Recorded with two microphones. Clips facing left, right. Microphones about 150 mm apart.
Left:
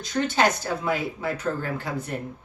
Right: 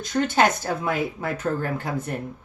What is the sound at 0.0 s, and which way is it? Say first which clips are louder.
A woman's voice: right 2 dB; 50° right (ahead or behind).